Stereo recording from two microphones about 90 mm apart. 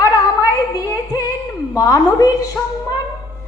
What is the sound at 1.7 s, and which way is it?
Speech, 40° left (ahead or behind).